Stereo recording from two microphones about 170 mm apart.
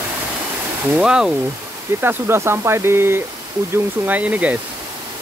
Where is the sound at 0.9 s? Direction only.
5° right (ahead or behind).